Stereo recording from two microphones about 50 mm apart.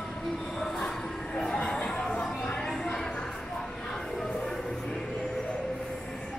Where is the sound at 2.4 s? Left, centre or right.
Centre.